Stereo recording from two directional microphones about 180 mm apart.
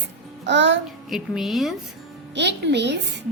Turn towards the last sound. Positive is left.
turn(degrees=-75)  # may be behind; listen again after turning